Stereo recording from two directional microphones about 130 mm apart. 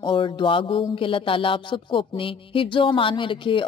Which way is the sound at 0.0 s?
40° left (ahead or behind).